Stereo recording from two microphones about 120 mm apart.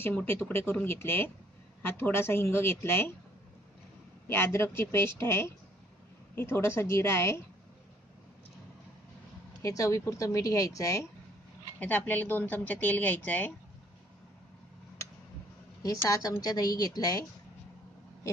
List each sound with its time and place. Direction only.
0.0 s speech: 15° left (ahead or behind)
4.3 s speech: 20° left (ahead or behind)
9.6 s speech: 25° left (ahead or behind)
11.8 s speech: 15° left (ahead or behind)
15.8 s a woman's voice: 30° left (ahead or behind)